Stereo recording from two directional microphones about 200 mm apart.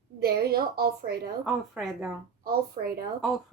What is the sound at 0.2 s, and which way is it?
A woman's voice, 50° right (ahead or behind).